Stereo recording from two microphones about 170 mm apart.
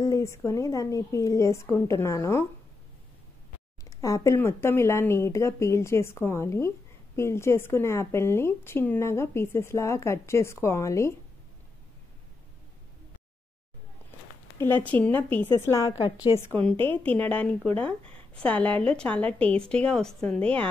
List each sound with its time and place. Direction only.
0.0 s speech: 20° left (ahead or behind)
3.9 s speech: 20° left (ahead or behind)
14.6 s speech: 10° left (ahead or behind)